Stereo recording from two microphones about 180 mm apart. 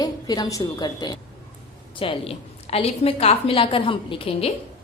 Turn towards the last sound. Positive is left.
turn(degrees=30)  # may be behind; listen again after turning